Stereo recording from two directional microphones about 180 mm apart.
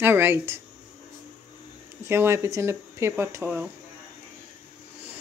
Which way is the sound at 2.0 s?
15° right (ahead or behind).